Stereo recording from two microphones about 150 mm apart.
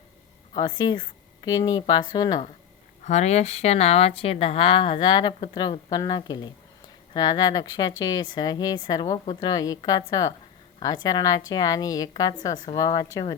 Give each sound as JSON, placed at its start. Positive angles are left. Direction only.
{"t": 0.5, "sound": "speech", "side_deg": 30}
{"t": 3.0, "sound": "speech", "side_deg": 50}